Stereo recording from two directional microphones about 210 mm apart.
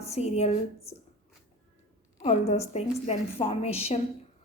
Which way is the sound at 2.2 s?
30° left (ahead or behind).